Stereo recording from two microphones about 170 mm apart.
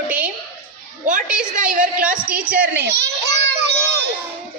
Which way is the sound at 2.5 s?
60° right (ahead or behind).